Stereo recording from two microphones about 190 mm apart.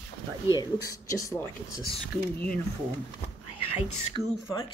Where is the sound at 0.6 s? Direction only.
15° left (ahead or behind).